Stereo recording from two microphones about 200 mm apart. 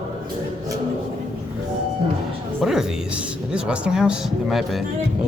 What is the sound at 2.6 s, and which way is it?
Speech, centre (ahead or behind).